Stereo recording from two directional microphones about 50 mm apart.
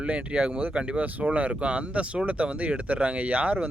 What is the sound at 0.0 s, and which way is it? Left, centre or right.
Speech, right.